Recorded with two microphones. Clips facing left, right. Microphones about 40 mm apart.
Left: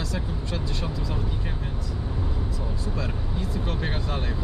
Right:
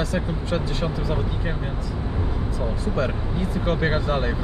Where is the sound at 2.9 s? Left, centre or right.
Right.